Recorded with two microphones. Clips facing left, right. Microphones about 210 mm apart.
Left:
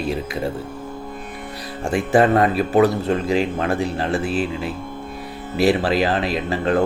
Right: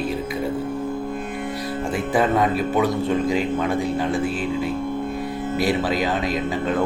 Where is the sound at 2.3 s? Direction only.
70° left (ahead or behind).